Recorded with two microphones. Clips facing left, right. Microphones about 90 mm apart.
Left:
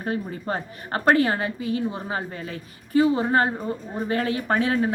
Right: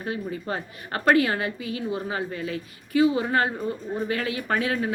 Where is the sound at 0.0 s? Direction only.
40° left (ahead or behind).